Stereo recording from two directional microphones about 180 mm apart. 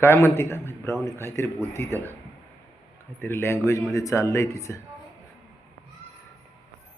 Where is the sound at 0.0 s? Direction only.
15° left (ahead or behind).